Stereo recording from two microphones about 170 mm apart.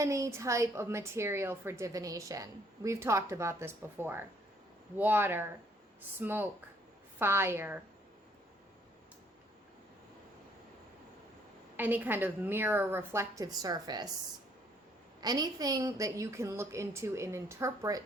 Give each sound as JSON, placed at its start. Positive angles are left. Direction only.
{"t": 0.0, "sound": "a woman's voice", "side_deg": -20}
{"t": 11.8, "sound": "a woman's voice", "side_deg": -10}
{"t": 15.2, "sound": "a woman's voice", "side_deg": -20}